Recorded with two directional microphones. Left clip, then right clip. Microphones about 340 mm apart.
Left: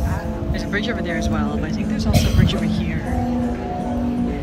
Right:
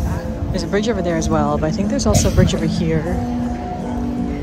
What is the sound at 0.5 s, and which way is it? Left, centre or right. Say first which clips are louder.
Speech: right 5 dB; centre.